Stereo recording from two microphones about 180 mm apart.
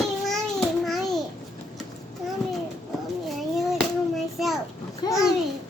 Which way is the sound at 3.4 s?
Centre (ahead or behind).